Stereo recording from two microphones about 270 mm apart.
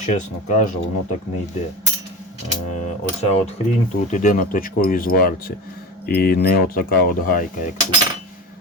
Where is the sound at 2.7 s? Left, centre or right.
Left.